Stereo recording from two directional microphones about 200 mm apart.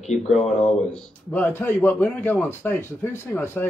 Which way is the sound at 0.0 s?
35° left (ahead or behind).